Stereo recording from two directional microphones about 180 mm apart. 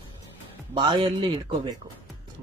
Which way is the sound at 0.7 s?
25° right (ahead or behind).